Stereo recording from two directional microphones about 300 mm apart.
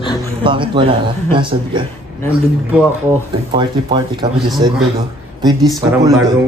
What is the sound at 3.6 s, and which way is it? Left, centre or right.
Speech, centre.